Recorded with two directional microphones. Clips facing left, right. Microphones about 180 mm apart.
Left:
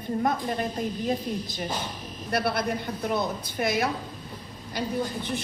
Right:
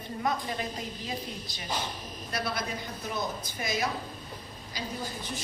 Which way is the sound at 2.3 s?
60° left (ahead or behind).